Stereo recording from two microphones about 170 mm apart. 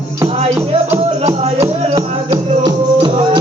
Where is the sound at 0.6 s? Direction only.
15° right (ahead or behind).